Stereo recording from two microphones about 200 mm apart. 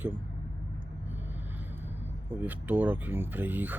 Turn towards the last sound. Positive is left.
turn(degrees=-10)  # may be behind; listen again after turning